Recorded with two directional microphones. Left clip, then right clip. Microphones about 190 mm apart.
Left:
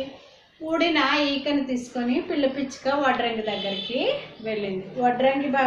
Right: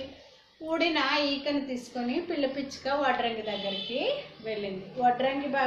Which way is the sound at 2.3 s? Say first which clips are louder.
Left 6 dB; 15° right (ahead or behind).